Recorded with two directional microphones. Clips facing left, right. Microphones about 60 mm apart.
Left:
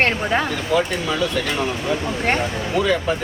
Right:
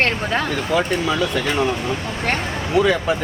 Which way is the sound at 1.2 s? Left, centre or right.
Centre.